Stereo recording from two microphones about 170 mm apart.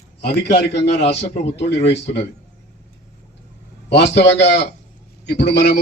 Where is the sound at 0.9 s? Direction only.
35° left (ahead or behind).